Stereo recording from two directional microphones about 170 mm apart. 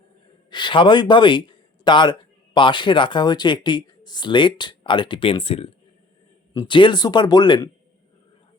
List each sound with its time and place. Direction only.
0.5 s a man's voice: 30° left (ahead or behind)
6.5 s speech: 25° left (ahead or behind)